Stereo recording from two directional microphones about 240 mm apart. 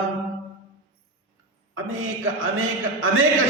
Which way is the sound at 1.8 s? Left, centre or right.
Right.